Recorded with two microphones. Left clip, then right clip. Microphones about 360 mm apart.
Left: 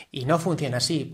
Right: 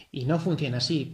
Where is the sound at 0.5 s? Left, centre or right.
Centre.